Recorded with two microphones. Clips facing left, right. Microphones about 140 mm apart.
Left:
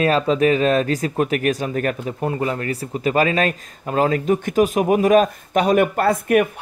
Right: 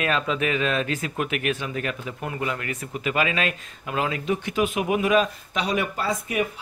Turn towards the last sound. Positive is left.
turn(degrees=60)  # may be behind; listen again after turning